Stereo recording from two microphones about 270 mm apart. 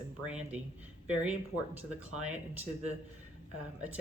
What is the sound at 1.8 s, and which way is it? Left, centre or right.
A woman's voice, centre.